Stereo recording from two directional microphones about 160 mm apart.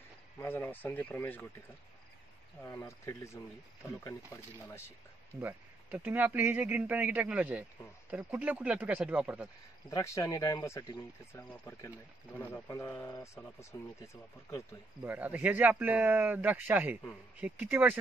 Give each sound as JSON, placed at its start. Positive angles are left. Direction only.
{"t": 0.4, "sound": "speech", "side_deg": 15}
{"t": 2.6, "sound": "speech", "side_deg": 20}
{"t": 5.4, "sound": "speech", "side_deg": -10}
{"t": 9.8, "sound": "speech", "side_deg": 20}
{"t": 15.0, "sound": "speech", "side_deg": -10}